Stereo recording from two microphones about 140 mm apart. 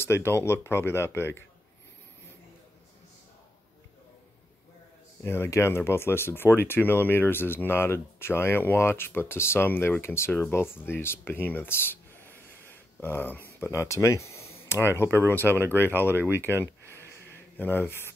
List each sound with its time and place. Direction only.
0.0 s speech: 15° left (ahead or behind)
5.2 s speech: 20° left (ahead or behind)
16.9 s a sound: 15° left (ahead or behind)